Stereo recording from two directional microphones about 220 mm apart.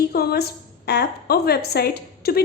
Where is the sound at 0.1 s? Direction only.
45° left (ahead or behind).